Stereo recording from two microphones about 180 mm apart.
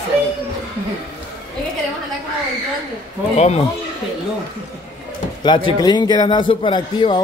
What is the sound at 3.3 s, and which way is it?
Speech, 35° left (ahead or behind).